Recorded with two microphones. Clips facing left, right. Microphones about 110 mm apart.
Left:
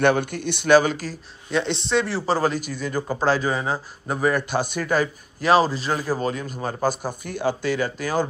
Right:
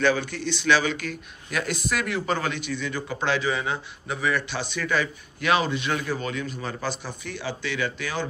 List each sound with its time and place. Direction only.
0.0 s a man's voice: 55° left (ahead or behind)
1.5 s a man's voice: 25° left (ahead or behind); by 8.3 s 40° left (ahead or behind)